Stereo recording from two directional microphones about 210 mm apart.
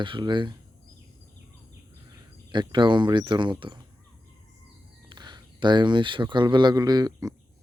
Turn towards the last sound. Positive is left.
turn(degrees=-15)  # may be behind; listen again after turning